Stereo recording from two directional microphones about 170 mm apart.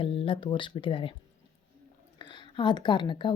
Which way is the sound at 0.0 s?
30° left (ahead or behind).